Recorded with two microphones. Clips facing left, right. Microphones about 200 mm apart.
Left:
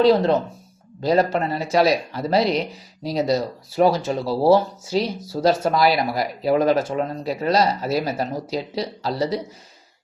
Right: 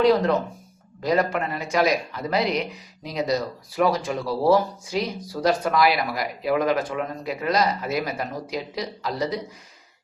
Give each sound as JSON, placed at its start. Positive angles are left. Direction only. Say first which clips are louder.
{"t": 0.0, "sound": "speech", "louder": "left 3 dB", "side_deg": 30}